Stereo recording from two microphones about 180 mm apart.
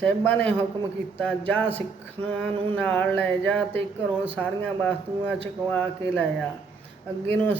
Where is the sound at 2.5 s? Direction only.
30° right (ahead or behind).